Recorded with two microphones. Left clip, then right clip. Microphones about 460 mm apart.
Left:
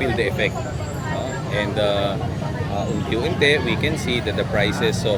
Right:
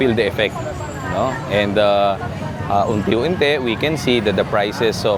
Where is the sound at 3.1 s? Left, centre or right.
Right.